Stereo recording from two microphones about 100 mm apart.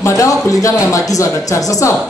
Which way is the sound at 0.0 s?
30° left (ahead or behind).